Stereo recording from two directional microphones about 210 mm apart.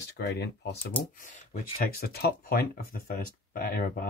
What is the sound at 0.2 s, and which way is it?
Speech, 50° left (ahead or behind).